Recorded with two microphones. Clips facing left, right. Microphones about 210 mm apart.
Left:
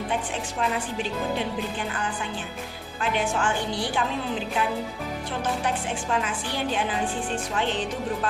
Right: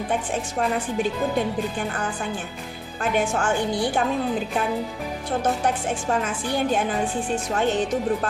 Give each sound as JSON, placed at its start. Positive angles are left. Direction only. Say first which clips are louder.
{"t": 3.0, "sound": "speech", "louder": "right 3 dB", "side_deg": -45}
{"t": 5.4, "sound": "speech", "louder": "right 4 dB", "side_deg": -45}